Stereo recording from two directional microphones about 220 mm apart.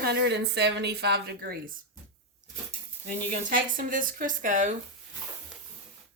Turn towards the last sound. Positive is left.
turn(degrees=-35)  # may be behind; listen again after turning